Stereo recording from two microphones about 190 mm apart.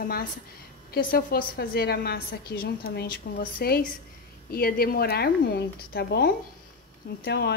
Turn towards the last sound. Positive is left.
turn(degrees=60)  # may be behind; listen again after turning